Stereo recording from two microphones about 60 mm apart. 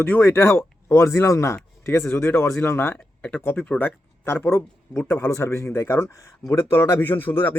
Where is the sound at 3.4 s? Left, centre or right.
Left.